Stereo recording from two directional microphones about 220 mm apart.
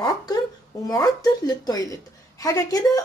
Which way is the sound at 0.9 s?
15° left (ahead or behind).